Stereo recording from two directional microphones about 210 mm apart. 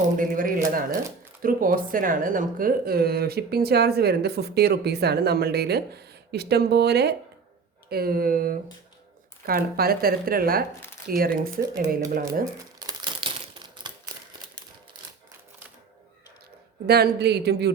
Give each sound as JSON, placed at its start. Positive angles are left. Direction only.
{"t": 0.2, "sound": "a sound", "side_deg": -40}
{"t": 1.4, "sound": "speech", "side_deg": -40}
{"t": 12.8, "sound": "crumpling", "side_deg": -20}
{"t": 16.8, "sound": "speech", "side_deg": -50}